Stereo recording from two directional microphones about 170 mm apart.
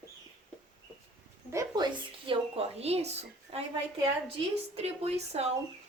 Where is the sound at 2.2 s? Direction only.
35° right (ahead or behind).